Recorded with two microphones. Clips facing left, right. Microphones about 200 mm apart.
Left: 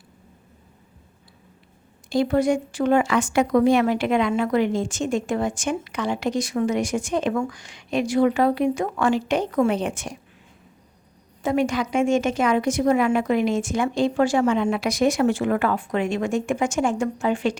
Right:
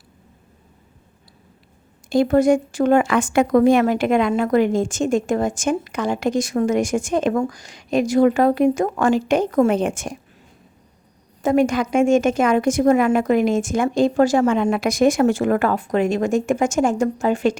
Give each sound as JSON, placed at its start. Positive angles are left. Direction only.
{"t": 2.0, "sound": "a woman's voice", "side_deg": -50}
{"t": 11.4, "sound": "a woman's voice", "side_deg": -45}